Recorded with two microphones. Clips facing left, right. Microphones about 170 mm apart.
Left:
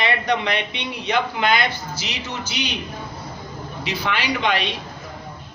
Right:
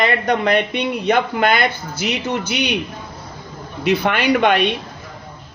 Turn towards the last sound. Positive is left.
turn(degrees=-55)  # may be behind; listen again after turning